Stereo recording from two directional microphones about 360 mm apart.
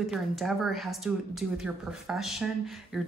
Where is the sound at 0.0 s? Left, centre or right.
Centre.